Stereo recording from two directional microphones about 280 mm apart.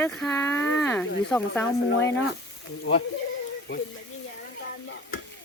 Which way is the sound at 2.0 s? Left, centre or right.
Left.